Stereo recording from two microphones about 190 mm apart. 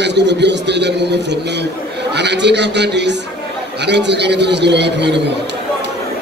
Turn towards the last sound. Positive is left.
turn(degrees=-65)  # may be behind; listen again after turning